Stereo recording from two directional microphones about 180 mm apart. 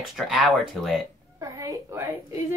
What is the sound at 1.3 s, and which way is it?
Speech, 15° right (ahead or behind).